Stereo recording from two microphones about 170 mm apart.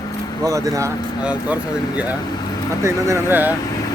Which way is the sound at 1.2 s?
10° right (ahead or behind).